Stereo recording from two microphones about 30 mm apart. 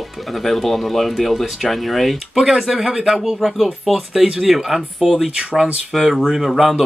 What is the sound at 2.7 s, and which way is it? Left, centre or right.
Speech, centre.